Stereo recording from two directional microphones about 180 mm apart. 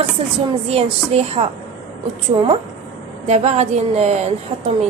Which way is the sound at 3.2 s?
40° right (ahead or behind).